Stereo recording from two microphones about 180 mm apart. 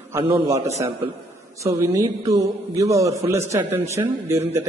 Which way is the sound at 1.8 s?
15° right (ahead or behind).